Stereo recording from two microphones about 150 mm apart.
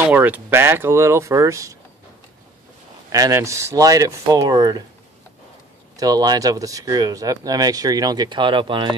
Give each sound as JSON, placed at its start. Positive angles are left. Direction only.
{"t": 0.1, "sound": "speech", "side_deg": -10}
{"t": 3.1, "sound": "speech", "side_deg": -20}
{"t": 5.9, "sound": "speech", "side_deg": -25}